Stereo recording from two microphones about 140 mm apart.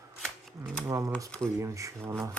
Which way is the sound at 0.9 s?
20° right (ahead or behind).